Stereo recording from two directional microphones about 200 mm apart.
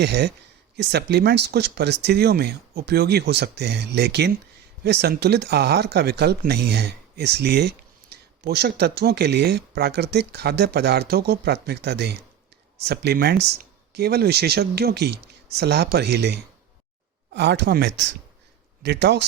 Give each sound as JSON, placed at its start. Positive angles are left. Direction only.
{"t": 0.0, "sound": "speech", "side_deg": -55}